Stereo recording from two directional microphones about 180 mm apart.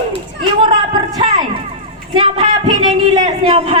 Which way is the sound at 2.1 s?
25° right (ahead or behind).